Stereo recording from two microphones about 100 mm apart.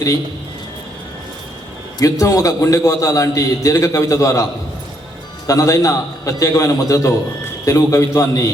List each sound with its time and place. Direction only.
2.0 s a man's voice: 35° left (ahead or behind)
5.5 s a man's voice: 35° left (ahead or behind)